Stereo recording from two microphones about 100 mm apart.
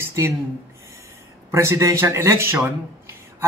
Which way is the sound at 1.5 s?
25° right (ahead or behind).